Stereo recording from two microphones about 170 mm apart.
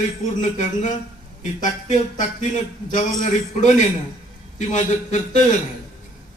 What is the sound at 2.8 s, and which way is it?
A man's voice, 45° left (ahead or behind).